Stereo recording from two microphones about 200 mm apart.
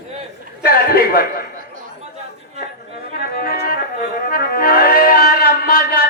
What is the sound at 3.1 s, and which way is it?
Music, 50° left (ahead or behind).